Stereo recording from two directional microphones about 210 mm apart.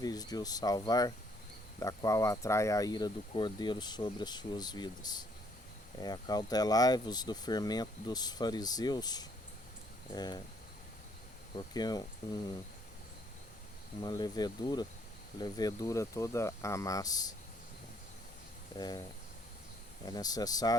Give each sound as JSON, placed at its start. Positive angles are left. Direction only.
{"t": 0.0, "sound": "speech", "side_deg": 20}
{"t": 11.5, "sound": "speech", "side_deg": 20}
{"t": 14.0, "sound": "speech", "side_deg": 20}
{"t": 18.8, "sound": "speech", "side_deg": 20}
{"t": 20.1, "sound": "speech", "side_deg": 20}